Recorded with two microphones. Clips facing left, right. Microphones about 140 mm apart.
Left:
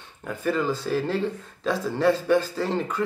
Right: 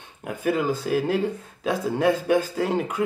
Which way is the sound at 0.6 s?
50° right (ahead or behind).